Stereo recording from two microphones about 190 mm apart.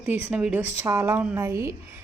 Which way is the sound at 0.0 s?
10° right (ahead or behind).